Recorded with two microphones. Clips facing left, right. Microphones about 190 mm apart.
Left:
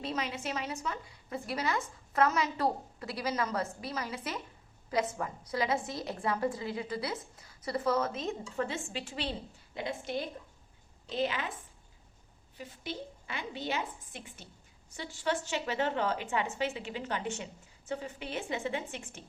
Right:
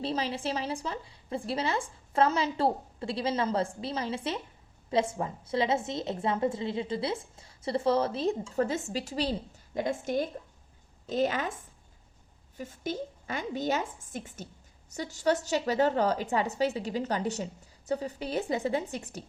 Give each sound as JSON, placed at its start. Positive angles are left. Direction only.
{"t": 0.0, "sound": "a woman's voice", "side_deg": -30}
{"t": 12.5, "sound": "a woman's voice", "side_deg": -45}